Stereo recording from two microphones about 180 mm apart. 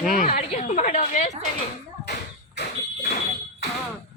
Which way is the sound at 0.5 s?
40° left (ahead or behind).